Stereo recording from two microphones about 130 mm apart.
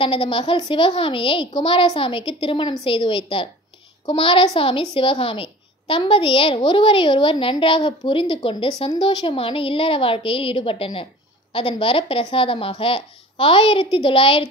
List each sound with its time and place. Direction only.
0.0 s a woman's voice: 45° left (ahead or behind)